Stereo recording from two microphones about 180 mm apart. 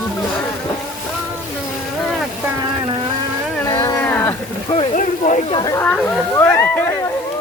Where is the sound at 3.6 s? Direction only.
20° left (ahead or behind).